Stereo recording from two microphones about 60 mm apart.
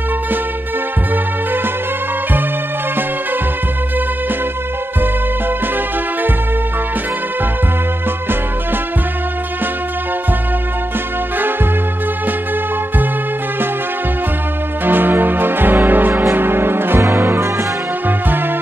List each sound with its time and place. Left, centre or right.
14.9 s music: right